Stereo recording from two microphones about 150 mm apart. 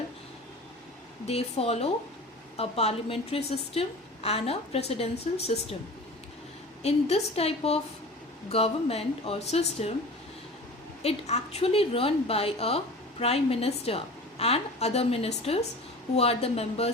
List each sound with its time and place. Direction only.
1.3 s a woman's voice: 45° left (ahead or behind)
6.8 s a woman's voice: 45° left (ahead or behind)
11.0 s a woman's voice: 45° left (ahead or behind)